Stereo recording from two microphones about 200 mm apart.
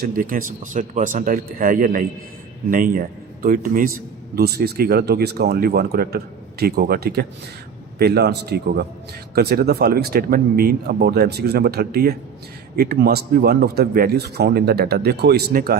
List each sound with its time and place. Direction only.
0.0 s a man's voice: 45° right (ahead or behind)